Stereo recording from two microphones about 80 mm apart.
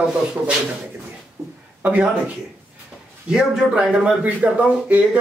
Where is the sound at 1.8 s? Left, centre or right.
Right.